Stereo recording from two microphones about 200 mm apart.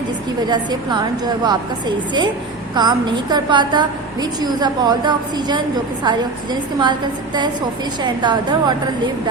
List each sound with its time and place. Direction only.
0.4 s a woman's voice: 20° right (ahead or behind)
2.7 s a woman's voice: 20° right (ahead or behind)
8.0 s a woman's voice: 20° right (ahead or behind)